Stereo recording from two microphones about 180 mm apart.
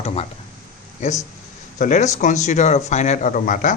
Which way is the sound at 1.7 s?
45° left (ahead or behind).